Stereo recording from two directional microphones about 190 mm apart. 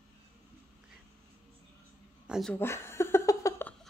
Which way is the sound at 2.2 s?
5° right (ahead or behind).